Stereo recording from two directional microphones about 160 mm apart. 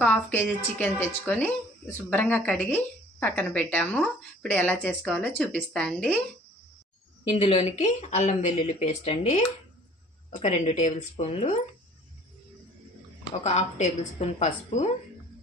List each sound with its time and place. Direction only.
0.0 s a woman's voice: 10° left (ahead or behind)
7.3 s speech: 35° left (ahead or behind)
10.4 s speech: 50° left (ahead or behind)
13.4 s speech: 45° left (ahead or behind)